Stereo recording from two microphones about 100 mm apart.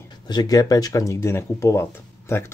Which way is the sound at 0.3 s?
40° left (ahead or behind).